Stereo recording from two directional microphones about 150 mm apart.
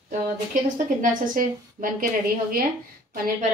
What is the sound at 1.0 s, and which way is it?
A woman's voice, 65° right (ahead or behind).